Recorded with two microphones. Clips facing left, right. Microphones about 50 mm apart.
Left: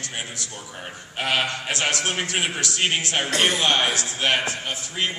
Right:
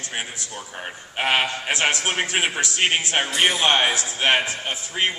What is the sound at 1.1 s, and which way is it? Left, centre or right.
A man's voice, right.